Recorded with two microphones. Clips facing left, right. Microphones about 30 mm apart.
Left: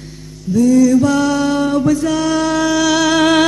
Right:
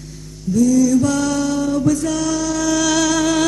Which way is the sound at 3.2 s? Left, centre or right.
Left.